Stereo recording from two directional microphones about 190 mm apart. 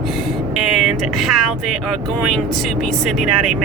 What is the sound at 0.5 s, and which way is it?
Speech, centre (ahead or behind).